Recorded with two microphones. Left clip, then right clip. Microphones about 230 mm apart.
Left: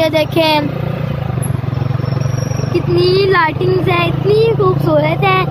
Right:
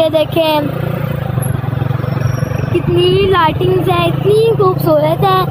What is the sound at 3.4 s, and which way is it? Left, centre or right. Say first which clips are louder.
Speech: right 2 dB; left.